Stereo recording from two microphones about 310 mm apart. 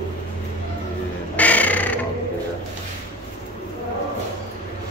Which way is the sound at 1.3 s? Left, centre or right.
Centre.